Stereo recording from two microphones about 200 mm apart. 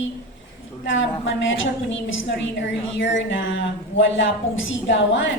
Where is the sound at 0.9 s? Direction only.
70° left (ahead or behind).